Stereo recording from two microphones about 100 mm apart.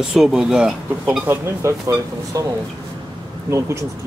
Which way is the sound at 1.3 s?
25° right (ahead or behind).